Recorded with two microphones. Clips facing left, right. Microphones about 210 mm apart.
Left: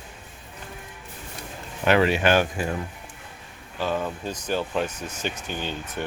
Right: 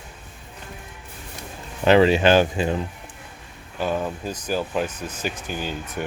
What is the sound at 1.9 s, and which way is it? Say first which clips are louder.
Speech: right 4 dB; 25° right (ahead or behind).